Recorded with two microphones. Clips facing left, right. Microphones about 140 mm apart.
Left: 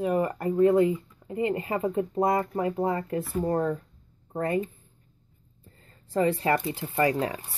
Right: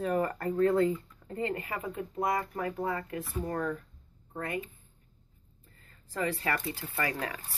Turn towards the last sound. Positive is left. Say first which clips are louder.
# left 9 dB
turn(degrees=25)  # may be behind; listen again after turning